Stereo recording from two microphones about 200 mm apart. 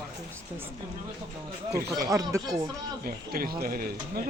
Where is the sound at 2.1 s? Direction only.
15° right (ahead or behind).